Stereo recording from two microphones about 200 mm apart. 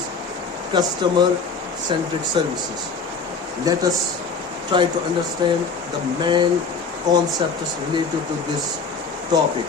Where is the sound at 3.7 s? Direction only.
15° right (ahead or behind).